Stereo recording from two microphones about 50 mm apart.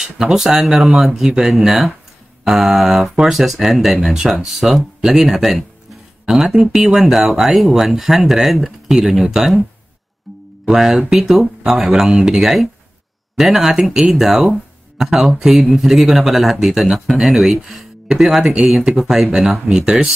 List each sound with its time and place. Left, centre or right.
0.0 s speech: centre
10.7 s speech: centre
18.9 s speech: centre